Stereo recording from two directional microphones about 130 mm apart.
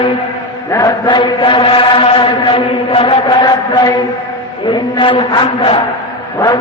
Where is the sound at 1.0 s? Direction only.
35° left (ahead or behind).